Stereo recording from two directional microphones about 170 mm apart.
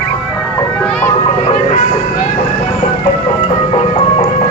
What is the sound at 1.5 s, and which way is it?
Music, 40° left (ahead or behind).